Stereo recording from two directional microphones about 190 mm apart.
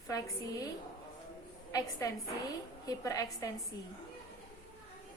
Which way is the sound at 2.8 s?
20° left (ahead or behind).